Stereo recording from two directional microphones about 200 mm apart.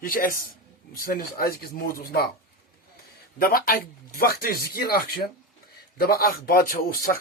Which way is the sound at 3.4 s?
45° left (ahead or behind).